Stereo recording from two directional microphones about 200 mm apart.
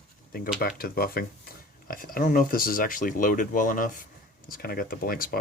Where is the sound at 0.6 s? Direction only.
50° left (ahead or behind).